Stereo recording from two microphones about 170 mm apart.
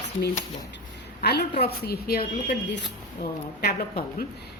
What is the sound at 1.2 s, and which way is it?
A woman's voice, 75° left (ahead or behind).